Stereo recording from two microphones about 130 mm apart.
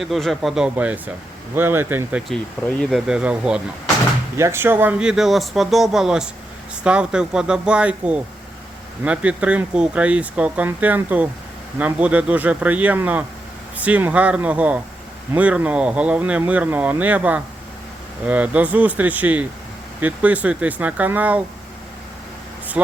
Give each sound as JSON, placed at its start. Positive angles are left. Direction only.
{"t": 0.0, "sound": "speech", "side_deg": 0}
{"t": 2.3, "sound": "speech", "side_deg": 5}
{"t": 3.1, "sound": "speech", "side_deg": -5}
{"t": 4.4, "sound": "speech", "side_deg": -20}